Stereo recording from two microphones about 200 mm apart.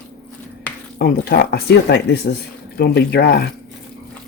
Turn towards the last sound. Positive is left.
turn(degrees=55)  # may be behind; listen again after turning